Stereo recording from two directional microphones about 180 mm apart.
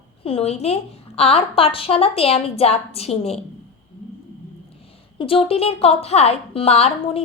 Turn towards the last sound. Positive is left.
turn(degrees=35)  # may be behind; listen again after turning